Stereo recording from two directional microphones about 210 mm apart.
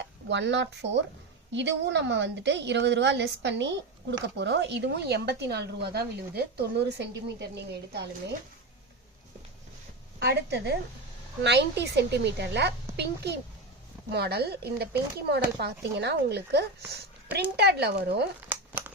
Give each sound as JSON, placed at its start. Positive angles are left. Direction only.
{"t": 0.0, "sound": "a woman's voice", "side_deg": -55}
{"t": 10.2, "sound": "speech", "side_deg": -50}
{"t": 18.7, "sound": "crumpling", "side_deg": -10}